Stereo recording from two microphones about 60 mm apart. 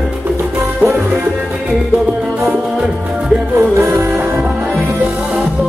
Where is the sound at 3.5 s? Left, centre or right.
Right.